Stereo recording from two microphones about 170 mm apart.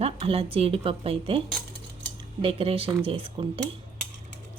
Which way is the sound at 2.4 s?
35° right (ahead or behind).